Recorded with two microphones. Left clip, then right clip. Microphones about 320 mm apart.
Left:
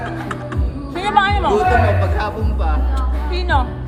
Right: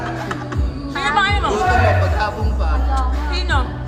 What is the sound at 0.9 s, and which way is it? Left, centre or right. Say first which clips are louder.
Music: left 2 dB; centre.